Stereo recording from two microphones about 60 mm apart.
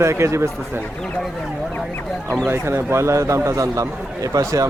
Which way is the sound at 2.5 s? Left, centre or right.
Right.